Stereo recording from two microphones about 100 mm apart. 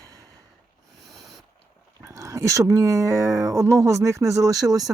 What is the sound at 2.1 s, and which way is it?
Speech, 30° right (ahead or behind).